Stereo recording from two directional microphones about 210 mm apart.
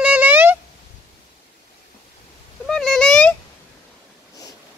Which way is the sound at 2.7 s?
Centre (ahead or behind).